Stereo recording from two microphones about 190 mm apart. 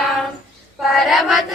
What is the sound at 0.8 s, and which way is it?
Choir, centre (ahead or behind).